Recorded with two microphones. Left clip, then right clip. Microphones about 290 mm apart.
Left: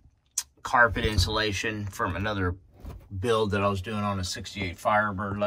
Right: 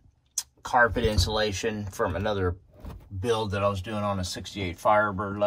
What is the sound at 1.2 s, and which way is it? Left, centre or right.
Speech, centre.